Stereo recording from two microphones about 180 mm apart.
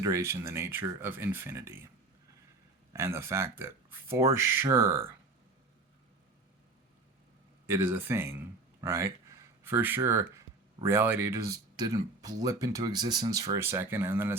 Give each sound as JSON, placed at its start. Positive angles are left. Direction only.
{"t": 0.0, "sound": "speech", "side_deg": -15}
{"t": 2.9, "sound": "speech", "side_deg": -15}
{"t": 7.7, "sound": "speech", "side_deg": -15}